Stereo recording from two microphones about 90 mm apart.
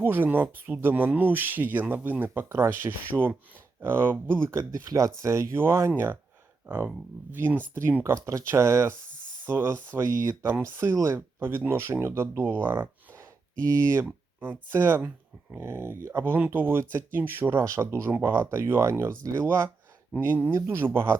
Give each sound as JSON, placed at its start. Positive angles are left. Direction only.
{"t": 0.0, "sound": "speech", "side_deg": -20}
{"t": 8.1, "sound": "speech", "side_deg": -35}
{"t": 10.0, "sound": "speech", "side_deg": -35}